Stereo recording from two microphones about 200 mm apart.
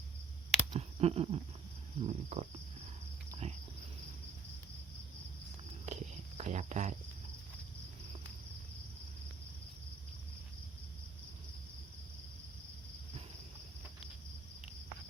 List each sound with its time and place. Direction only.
0.7 s a sound: 30° right (ahead or behind)
2.0 s cricket: 35° right (ahead or behind)
5.8 s walk: 35° right (ahead or behind)